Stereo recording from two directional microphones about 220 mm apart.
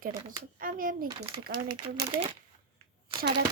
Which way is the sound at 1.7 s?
25° right (ahead or behind).